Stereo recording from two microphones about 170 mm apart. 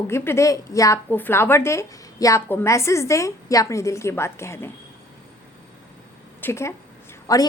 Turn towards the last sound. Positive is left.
turn(degrees=20)  # may be behind; listen again after turning